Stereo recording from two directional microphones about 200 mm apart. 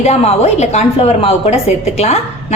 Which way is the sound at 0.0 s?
35° left (ahead or behind).